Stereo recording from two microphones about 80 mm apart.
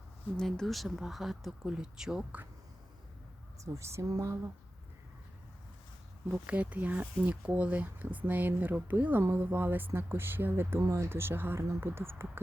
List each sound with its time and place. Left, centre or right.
0.3 s speech: centre
3.6 s speech: right
6.3 s speech: centre